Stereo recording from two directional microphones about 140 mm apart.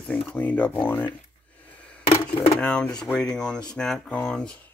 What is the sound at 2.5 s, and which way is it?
Speech, 5° left (ahead or behind).